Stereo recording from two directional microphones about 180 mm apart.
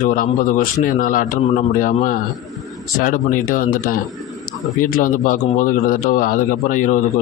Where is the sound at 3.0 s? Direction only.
50° left (ahead or behind).